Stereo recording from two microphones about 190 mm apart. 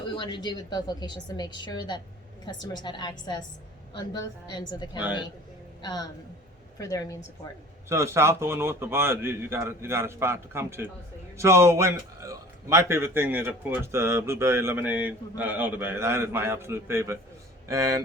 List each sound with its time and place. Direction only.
0.1 s a woman's voice: 25° left (ahead or behind)
7.9 s a man's voice: 15° right (ahead or behind)